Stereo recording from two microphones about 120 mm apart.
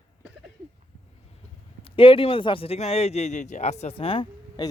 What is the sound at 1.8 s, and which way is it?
A man's voice, 50° left (ahead or behind).